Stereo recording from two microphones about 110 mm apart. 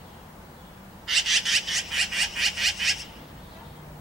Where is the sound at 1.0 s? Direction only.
Centre (ahead or behind).